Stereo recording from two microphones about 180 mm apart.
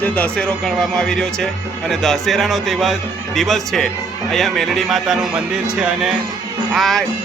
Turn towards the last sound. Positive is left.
turn(degrees=0)  # may be behind; listen again after turning